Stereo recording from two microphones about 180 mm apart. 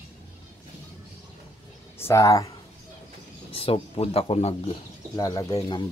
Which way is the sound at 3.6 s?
30° left (ahead or behind).